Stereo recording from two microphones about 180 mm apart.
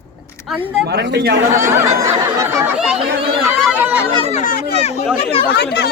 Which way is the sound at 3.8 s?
10° right (ahead or behind).